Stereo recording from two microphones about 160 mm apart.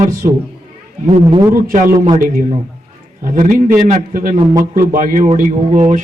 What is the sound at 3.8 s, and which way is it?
A man's voice, 60° right (ahead or behind).